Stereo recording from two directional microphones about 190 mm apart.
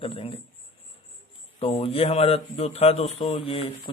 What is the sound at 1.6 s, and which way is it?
A man's voice, 30° left (ahead or behind).